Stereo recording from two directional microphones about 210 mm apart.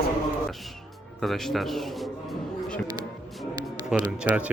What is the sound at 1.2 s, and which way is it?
Speech, centre (ahead or behind).